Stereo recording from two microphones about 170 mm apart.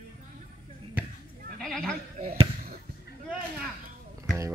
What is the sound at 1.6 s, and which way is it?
Speech, 5° left (ahead or behind).